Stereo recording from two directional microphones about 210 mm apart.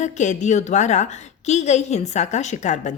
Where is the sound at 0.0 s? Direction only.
35° left (ahead or behind).